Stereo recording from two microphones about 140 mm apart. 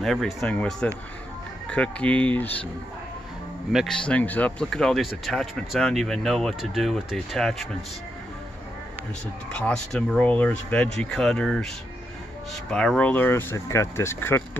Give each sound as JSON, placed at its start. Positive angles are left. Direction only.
{"t": 0.0, "sound": "speech", "side_deg": 0}
{"t": 3.7, "sound": "speech", "side_deg": 5}
{"t": 9.5, "sound": "speech", "side_deg": 5}